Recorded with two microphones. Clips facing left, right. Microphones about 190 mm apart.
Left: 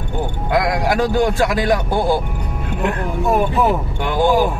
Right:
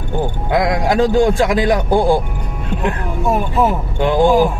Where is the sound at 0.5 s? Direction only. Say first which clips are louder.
Right 1 dB; 20° right (ahead or behind).